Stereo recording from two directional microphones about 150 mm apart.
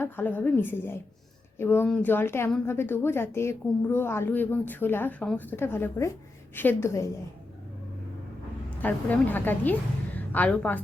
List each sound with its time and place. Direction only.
0.0 s a woman's voice: 10° left (ahead or behind)
8.8 s a woman's voice: 10° left (ahead or behind)